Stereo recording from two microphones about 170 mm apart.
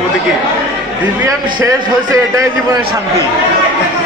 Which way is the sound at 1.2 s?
20° right (ahead or behind).